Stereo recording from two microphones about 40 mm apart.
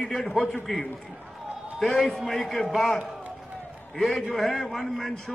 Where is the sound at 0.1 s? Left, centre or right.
Left.